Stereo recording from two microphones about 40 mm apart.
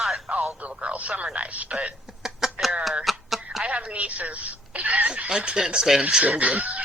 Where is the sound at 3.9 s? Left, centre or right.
Right.